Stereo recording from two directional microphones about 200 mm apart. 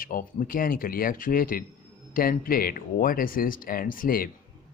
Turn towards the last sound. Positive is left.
turn(degrees=45)  # may be behind; listen again after turning